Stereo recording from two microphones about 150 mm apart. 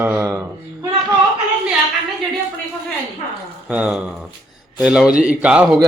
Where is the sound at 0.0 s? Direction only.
15° right (ahead or behind).